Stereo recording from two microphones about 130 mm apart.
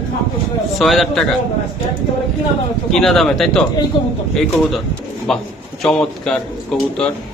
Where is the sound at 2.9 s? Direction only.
Centre (ahead or behind).